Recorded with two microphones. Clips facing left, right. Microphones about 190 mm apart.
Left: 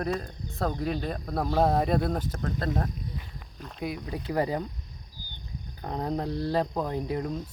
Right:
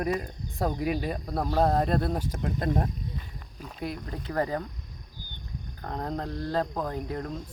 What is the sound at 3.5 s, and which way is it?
Speech, centre (ahead or behind).